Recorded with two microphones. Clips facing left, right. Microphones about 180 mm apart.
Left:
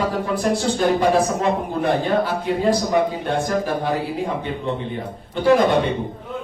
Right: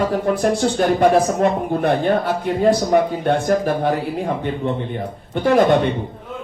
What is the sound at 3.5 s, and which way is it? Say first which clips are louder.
Speech: right 4 dB; 60° right (ahead or behind).